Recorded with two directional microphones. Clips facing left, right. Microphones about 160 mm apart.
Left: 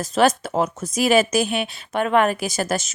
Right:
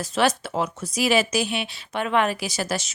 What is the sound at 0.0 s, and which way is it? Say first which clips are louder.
Speech: left 4 dB; 45° left (ahead or behind).